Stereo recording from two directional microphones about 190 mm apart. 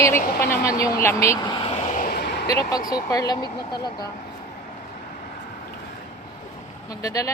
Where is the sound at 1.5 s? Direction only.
30° left (ahead or behind).